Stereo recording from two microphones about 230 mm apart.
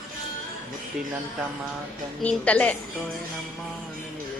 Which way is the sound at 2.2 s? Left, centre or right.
Centre.